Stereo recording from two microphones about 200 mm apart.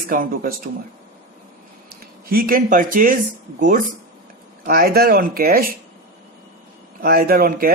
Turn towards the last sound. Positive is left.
turn(degrees=-50)  # may be behind; listen again after turning